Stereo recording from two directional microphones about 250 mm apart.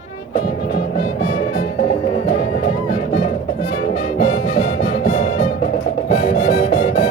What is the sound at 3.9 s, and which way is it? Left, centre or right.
Music, left.